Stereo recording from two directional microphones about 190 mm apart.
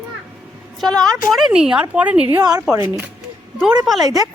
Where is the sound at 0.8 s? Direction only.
Centre (ahead or behind).